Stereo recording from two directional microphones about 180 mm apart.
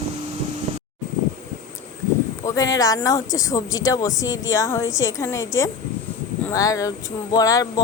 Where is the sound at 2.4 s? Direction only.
20° left (ahead or behind).